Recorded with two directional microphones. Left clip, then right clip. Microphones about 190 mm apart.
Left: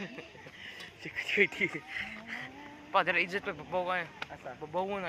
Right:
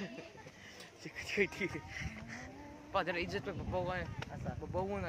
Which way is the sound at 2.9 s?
25° left (ahead or behind).